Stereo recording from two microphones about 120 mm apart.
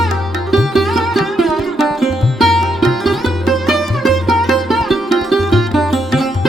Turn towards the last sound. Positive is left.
turn(degrees=0)  # may be behind; listen again after turning